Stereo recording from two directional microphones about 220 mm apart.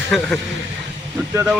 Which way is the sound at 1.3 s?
10° right (ahead or behind).